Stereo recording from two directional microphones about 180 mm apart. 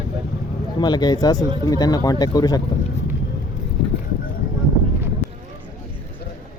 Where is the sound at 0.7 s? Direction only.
25° left (ahead or behind).